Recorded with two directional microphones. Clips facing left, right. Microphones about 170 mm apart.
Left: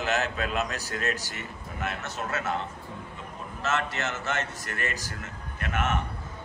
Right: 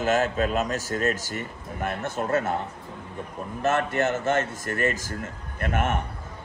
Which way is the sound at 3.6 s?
55° right (ahead or behind).